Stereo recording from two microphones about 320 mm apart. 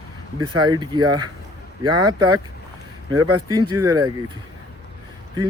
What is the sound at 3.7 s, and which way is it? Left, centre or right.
Speech, centre.